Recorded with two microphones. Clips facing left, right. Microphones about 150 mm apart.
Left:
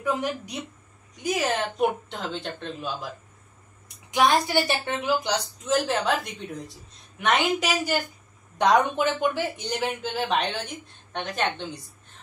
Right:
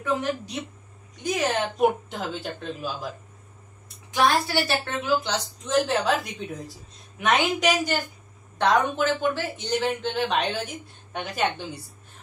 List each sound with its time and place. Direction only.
0.0 s speech: 10° left (ahead or behind)
1.8 s speech: 5° right (ahead or behind)
4.1 s speech: 15° left (ahead or behind)
5.7 s speech: centre (ahead or behind)
7.2 s speech: centre (ahead or behind)
10.3 s a woman's voice: centre (ahead or behind)